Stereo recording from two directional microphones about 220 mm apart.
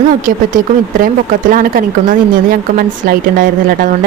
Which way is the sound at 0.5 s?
40° right (ahead or behind).